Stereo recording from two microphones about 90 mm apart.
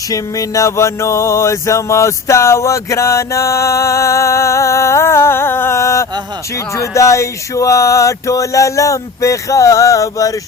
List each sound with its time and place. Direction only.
0.1 s music: 40° left (ahead or behind)